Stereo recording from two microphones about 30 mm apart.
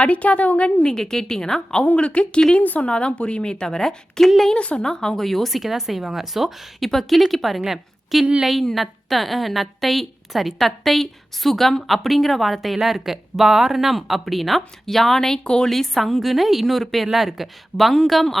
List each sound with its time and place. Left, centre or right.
0.0 s a woman's voice: left
0.9 s a woman's voice: left
2.0 s speech: left
2.6 s a woman's voice: left
2.8 s speech: left
3.8 s a woman's voice: centre
4.5 s speech: left
4.8 s a woman's voice: left
5.2 s speech: centre